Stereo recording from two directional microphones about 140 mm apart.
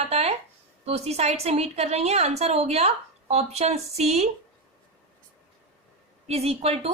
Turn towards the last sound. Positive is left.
turn(degrees=-45)  # may be behind; listen again after turning